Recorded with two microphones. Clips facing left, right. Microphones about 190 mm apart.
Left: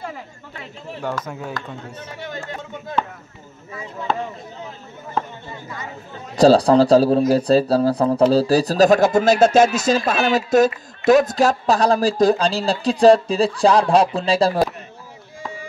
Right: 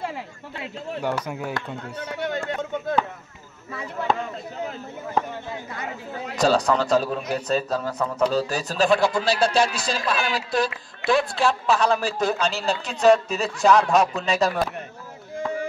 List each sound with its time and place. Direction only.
1.0 s speech: 10° right (ahead or behind)
2.0 s run: 65° right (ahead or behind)
5.8 s speech: 70° right (ahead or behind)
6.3 s speech: 35° left (ahead or behind)
15.3 s a sound: 55° right (ahead or behind)